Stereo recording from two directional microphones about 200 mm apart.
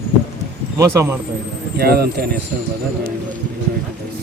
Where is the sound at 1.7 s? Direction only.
50° right (ahead or behind).